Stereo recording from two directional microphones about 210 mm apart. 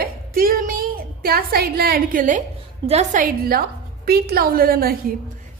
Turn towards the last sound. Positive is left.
turn(degrees=-45)  # may be behind; listen again after turning